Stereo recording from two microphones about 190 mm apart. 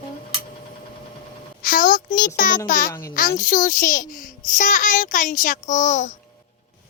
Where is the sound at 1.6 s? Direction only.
50° left (ahead or behind).